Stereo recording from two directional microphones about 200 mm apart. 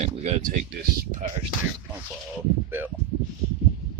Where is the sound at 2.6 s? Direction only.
10° right (ahead or behind).